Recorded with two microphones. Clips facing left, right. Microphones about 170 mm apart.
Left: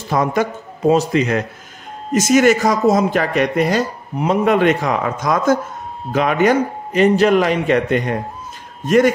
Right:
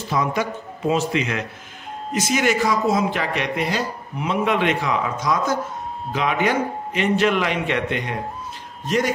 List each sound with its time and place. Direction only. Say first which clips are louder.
0.1 s a man's voice: left 5 dB; 50° left (ahead or behind)